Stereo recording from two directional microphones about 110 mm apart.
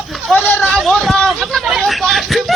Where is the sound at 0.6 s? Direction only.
Centre (ahead or behind).